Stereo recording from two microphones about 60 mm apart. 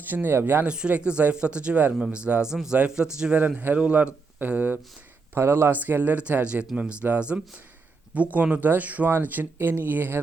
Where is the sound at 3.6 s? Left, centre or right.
Right.